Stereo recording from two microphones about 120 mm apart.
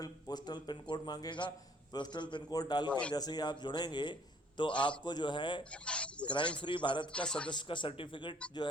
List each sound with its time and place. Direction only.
0.0 s a man's voice: 35° left (ahead or behind)
5.7 s a sound: 10° left (ahead or behind)
6.2 s a man's voice: 40° left (ahead or behind)
7.1 s speech: 10° left (ahead or behind)
7.5 s speech: 40° left (ahead or behind)